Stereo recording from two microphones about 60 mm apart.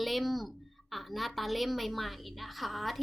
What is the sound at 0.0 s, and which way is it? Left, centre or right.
A woman's voice, centre.